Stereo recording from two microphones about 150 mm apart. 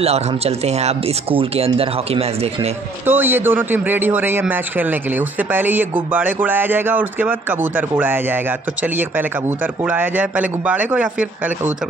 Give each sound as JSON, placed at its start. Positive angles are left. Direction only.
{"t": 0.0, "sound": "speech", "side_deg": -45}
{"t": 3.1, "sound": "a man's voice", "side_deg": -15}